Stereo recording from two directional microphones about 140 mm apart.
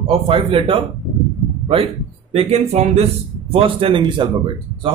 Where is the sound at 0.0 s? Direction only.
40° right (ahead or behind).